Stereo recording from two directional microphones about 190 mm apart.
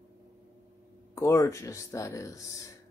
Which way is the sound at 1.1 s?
15° left (ahead or behind).